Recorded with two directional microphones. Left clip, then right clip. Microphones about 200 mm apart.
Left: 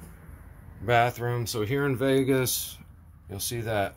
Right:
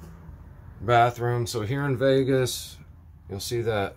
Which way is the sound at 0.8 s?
15° right (ahead or behind).